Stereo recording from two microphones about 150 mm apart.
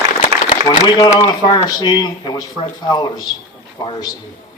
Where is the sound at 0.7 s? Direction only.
30° left (ahead or behind).